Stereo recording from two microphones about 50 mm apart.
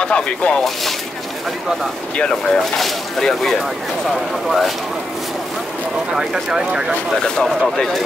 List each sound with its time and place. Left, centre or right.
0.0 s speech: left
2.1 s speech: centre
6.1 s speech: centre
7.2 s speech: centre